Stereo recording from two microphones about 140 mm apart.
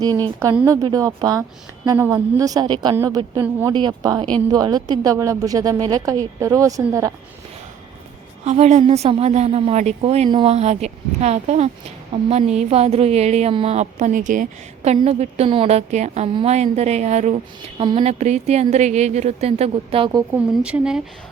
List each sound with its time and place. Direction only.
0.7 s a woman's voice: 25° right (ahead or behind)
2.9 s speech: 20° right (ahead or behind)
3.7 s a woman's voice: 30° right (ahead or behind)
8.4 s a woman's voice: 50° right (ahead or behind)
17.7 s a woman's voice: 40° right (ahead or behind)
20.3 s speech: 10° right (ahead or behind)